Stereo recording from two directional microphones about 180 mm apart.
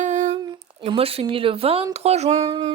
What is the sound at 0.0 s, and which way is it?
Humming, 40° right (ahead or behind).